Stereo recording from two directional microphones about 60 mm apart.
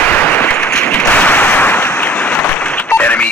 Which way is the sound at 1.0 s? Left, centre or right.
Left.